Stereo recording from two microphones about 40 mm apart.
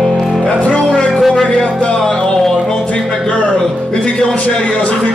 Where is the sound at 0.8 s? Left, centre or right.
Centre.